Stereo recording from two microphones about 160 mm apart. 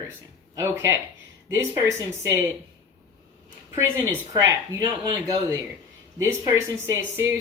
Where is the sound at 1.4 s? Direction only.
20° right (ahead or behind).